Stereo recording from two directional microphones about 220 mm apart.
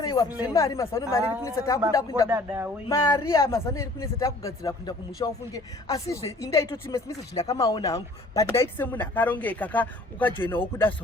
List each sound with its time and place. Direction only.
0.0 s a sound: 15° left (ahead or behind)
0.4 s speech: 15° left (ahead or behind)
2.2 s speech: 10° right (ahead or behind)
2.9 s speech: 15° left (ahead or behind)